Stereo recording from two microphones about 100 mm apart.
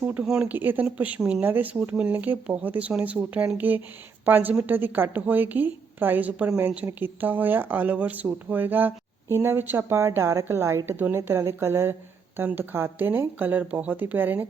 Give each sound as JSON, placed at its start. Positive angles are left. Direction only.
{"t": 0.0, "sound": "speech", "side_deg": -15}